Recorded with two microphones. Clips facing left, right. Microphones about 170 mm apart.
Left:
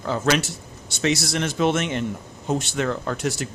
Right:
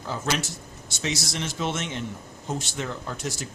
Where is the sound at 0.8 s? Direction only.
60° left (ahead or behind).